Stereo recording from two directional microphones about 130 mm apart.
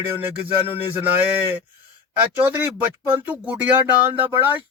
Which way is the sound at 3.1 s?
10° right (ahead or behind).